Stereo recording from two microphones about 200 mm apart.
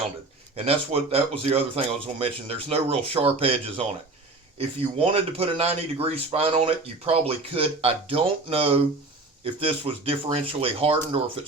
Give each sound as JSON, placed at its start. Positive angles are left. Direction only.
{"t": 0.5, "sound": "speech", "side_deg": -30}